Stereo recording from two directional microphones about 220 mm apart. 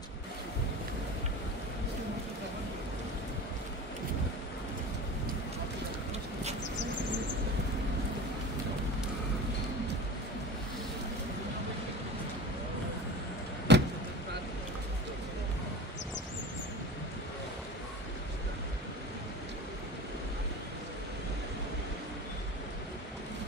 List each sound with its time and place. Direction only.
13.7 s vehicle: 50° right (ahead or behind)